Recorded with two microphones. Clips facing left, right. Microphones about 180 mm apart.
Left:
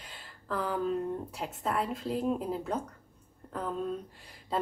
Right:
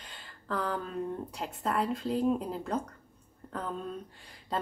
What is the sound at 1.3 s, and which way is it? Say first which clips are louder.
A woman's voice: right 3 dB; 5° left (ahead or behind).